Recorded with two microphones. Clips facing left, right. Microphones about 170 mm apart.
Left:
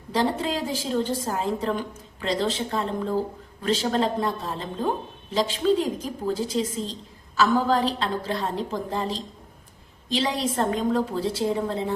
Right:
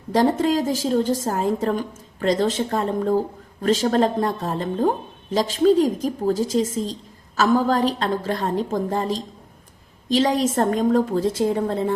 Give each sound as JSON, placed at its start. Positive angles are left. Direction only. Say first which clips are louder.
{"t": 0.1, "sound": "a woman's voice", "louder": "right 6 dB", "side_deg": -45}